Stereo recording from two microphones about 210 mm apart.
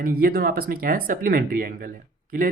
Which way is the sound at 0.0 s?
45° right (ahead or behind).